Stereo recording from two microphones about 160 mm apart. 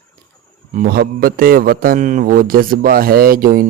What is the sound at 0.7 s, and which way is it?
A man's voice, 60° right (ahead or behind).